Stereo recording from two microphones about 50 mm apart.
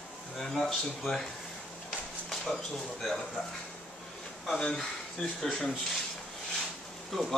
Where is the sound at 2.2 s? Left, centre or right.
Centre.